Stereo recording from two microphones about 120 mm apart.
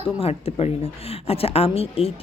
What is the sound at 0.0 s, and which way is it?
A man's voice, 55° left (ahead or behind).